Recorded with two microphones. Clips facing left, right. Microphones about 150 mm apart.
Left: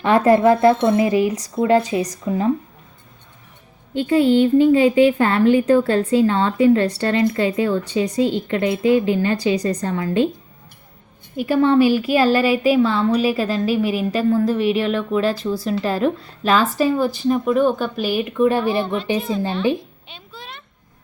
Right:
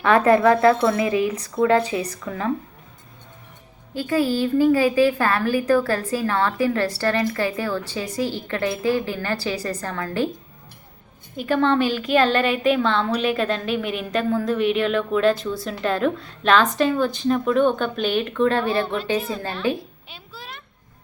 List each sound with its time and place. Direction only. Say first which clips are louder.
0.0 s a woman's voice: left 2 dB; 20° left (ahead or behind)
3.9 s a woman's voice: left 6 dB; 25° left (ahead or behind)
11.3 s a woman's voice: left 4 dB; 10° left (ahead or behind)
20.1 s a sound: left 1 dB; 5° right (ahead or behind)